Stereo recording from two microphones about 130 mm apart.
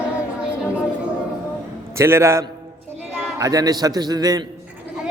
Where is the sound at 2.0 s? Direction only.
20° right (ahead or behind).